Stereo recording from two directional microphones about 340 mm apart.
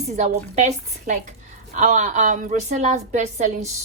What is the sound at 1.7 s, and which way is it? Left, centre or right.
A woman's voice, right.